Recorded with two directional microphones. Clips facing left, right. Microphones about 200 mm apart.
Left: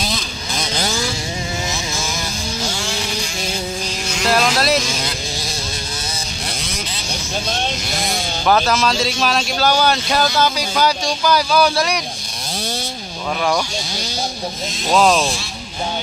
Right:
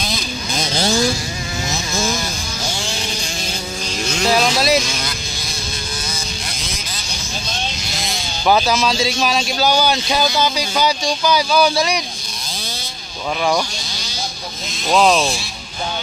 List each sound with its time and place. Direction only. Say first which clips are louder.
0.6 s vehicle: right 4 dB; 30° right (ahead or behind)
4.3 s vehicle: even; centre (ahead or behind)
7.5 s vehicle: left 4 dB; 60° left (ahead or behind)
8.5 s a man's voice: right 1 dB; 5° right (ahead or behind)
14.9 s a man's voice: even; centre (ahead or behind)